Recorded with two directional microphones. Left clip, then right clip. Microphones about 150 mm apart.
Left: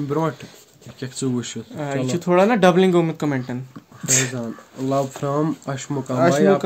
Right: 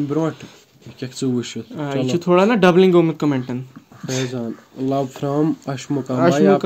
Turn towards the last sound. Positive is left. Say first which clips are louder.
# right 1 dB
turn(degrees=-5)  # may be behind; listen again after turning